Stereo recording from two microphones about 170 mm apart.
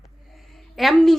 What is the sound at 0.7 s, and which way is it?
Speech, centre (ahead or behind).